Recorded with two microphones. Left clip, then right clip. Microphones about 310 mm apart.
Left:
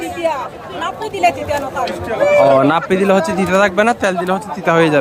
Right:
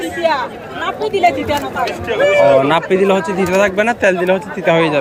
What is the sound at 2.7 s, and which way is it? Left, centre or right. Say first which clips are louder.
Speech: right 1 dB; centre.